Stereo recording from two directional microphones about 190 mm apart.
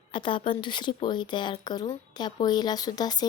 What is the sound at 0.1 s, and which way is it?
A woman's voice, 25° left (ahead or behind).